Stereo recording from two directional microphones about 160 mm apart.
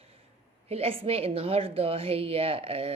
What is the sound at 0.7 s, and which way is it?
A woman's voice, 40° right (ahead or behind).